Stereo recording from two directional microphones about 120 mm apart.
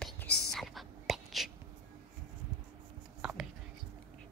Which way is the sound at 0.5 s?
Centre (ahead or behind).